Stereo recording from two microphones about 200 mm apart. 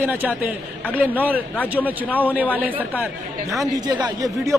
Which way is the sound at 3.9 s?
20° right (ahead or behind).